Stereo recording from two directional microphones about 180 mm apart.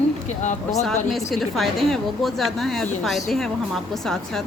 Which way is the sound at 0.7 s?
Centre (ahead or behind).